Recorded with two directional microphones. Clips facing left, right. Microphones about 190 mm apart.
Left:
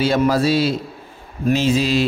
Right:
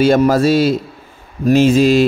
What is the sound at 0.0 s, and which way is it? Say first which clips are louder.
A man's voice: right 5 dB; 50° right (ahead or behind).